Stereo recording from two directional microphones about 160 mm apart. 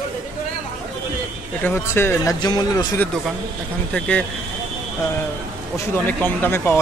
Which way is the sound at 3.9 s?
5° left (ahead or behind).